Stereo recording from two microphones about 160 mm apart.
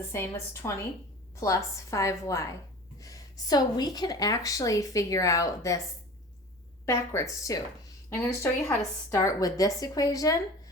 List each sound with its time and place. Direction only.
0.1 s a woman's voice: 15° left (ahead or behind)
6.8 s a woman's voice: 15° left (ahead or behind)